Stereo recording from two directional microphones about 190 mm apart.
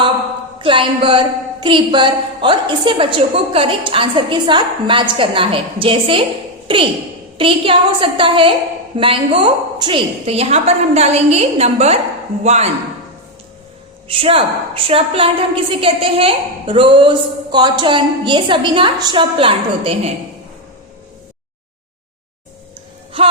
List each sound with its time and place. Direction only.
0.6 s a woman's voice: 25° right (ahead or behind)
7.3 s a woman's voice: 25° right (ahead or behind)
14.1 s a woman's voice: 30° right (ahead or behind)